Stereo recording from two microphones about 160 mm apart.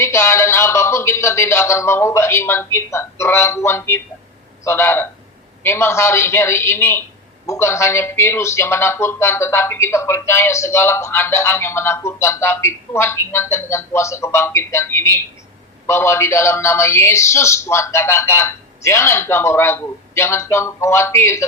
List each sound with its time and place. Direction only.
0.0 s a man's voice: 15° left (ahead or behind)